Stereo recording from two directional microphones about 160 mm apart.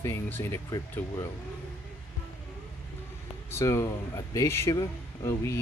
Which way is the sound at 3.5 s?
15° left (ahead or behind).